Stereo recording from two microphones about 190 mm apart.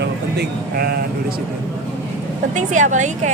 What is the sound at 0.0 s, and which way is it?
Speech, 55° right (ahead or behind).